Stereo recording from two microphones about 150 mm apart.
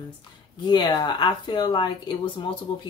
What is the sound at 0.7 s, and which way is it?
A woman's voice, 30° left (ahead or behind).